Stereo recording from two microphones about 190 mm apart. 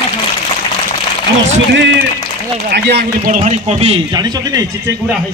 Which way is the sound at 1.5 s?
70° right (ahead or behind).